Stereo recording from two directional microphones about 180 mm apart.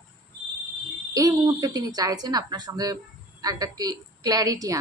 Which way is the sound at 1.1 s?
20° right (ahead or behind).